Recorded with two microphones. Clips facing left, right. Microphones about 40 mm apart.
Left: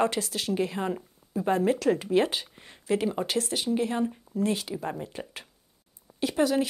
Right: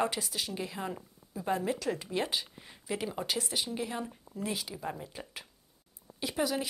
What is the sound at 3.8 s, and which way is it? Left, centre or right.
A woman's voice, centre.